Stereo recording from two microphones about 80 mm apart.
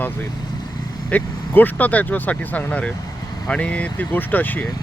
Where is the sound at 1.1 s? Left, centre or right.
Left.